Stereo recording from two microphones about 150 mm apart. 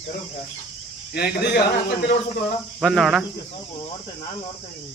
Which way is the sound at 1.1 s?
90° left.